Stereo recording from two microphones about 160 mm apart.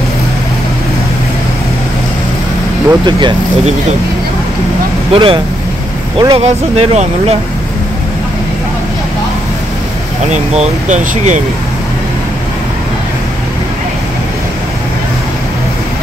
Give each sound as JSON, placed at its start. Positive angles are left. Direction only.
{"t": 2.9, "sound": "speech", "side_deg": -30}
{"t": 5.1, "sound": "speech", "side_deg": -35}
{"t": 10.3, "sound": "speech", "side_deg": -45}